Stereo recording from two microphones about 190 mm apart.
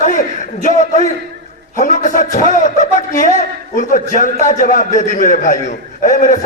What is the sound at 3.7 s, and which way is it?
A man's voice, 40° left (ahead or behind).